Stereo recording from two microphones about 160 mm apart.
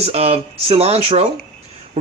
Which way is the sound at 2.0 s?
40° right (ahead or behind).